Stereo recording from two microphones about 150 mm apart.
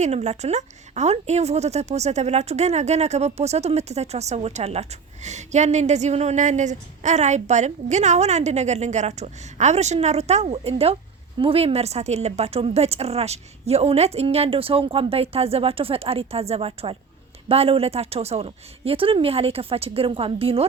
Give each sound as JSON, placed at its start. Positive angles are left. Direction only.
{"t": 0.0, "sound": "a woman's voice", "side_deg": -50}